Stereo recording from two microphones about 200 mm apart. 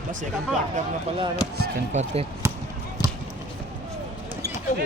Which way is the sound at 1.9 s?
35° right (ahead or behind).